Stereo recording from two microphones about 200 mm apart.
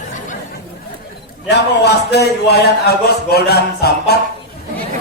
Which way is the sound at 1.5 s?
55° left (ahead or behind).